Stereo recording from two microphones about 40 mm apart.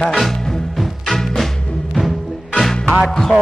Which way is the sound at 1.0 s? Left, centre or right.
Centre.